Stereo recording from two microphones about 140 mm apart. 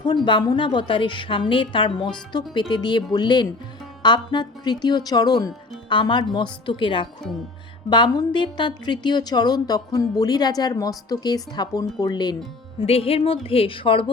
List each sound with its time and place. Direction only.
0.0 s a woman's voice: 35° left (ahead or behind)
12.8 s a woman's voice: 45° left (ahead or behind)